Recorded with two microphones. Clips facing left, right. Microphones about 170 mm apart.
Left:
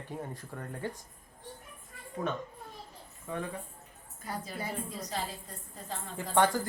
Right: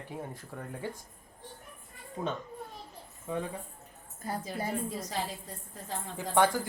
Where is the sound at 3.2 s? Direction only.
20° right (ahead or behind).